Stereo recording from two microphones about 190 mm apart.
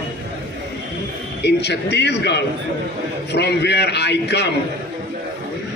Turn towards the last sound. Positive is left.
turn(degrees=60)  # may be behind; listen again after turning